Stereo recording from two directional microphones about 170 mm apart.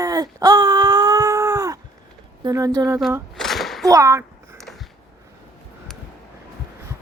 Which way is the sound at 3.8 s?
20° right (ahead or behind).